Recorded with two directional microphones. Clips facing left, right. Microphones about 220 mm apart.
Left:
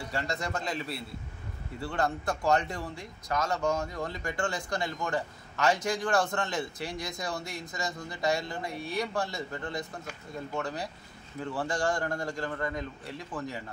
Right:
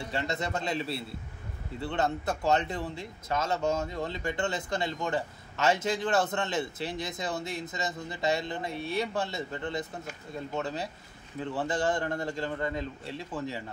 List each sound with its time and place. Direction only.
0.1 s speech: 25° right (ahead or behind)